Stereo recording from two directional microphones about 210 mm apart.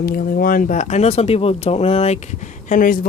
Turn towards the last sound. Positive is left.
turn(degrees=40)  # may be behind; listen again after turning